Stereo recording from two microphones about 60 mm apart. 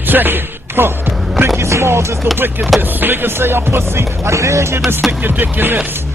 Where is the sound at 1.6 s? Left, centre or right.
Right.